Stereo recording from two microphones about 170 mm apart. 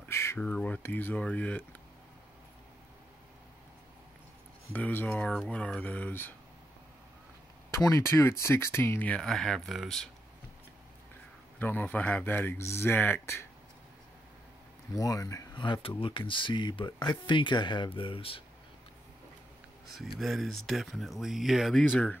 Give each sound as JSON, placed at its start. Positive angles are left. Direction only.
{"t": 0.1, "sound": "speech", "side_deg": 15}
{"t": 4.7, "sound": "speech", "side_deg": 10}
{"t": 7.8, "sound": "speech", "side_deg": 15}
{"t": 11.6, "sound": "speech", "side_deg": 10}
{"t": 15.0, "sound": "speech", "side_deg": 20}
{"t": 20.0, "sound": "speech", "side_deg": 0}